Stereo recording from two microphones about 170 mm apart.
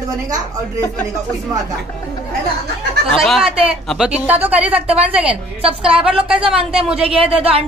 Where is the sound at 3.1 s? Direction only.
Centre (ahead or behind).